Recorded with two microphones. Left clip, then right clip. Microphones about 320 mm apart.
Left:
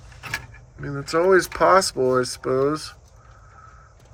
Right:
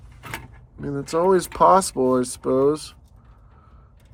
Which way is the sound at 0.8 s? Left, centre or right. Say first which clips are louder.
Even; centre.